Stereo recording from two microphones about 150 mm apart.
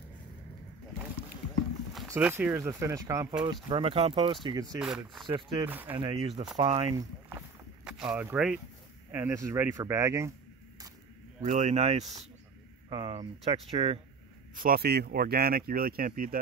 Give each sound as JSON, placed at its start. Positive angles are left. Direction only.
{"t": 2.1, "sound": "speech", "side_deg": -10}
{"t": 3.6, "sound": "speech", "side_deg": -35}
{"t": 4.7, "sound": "speech", "side_deg": -5}
{"t": 5.7, "sound": "speech", "side_deg": -10}
{"t": 5.9, "sound": "speech", "side_deg": -35}
{"t": 6.9, "sound": "a sound", "side_deg": -25}
{"t": 7.8, "sound": "speech", "side_deg": -5}
{"t": 9.1, "sound": "speech", "side_deg": -15}
{"t": 11.4, "sound": "speech", "side_deg": -50}
{"t": 12.9, "sound": "speech", "side_deg": -35}
{"t": 14.5, "sound": "speech", "side_deg": -70}